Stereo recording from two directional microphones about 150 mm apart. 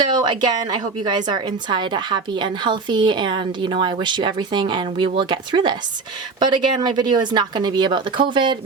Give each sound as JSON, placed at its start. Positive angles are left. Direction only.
{"t": 0.1, "sound": "a woman's voice", "side_deg": -30}